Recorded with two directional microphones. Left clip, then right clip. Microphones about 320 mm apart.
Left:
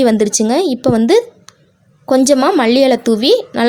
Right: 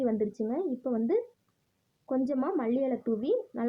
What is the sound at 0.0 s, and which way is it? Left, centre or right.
A woman's voice, left.